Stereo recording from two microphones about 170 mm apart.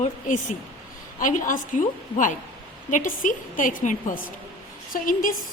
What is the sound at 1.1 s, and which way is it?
A woman's voice, 50° left (ahead or behind).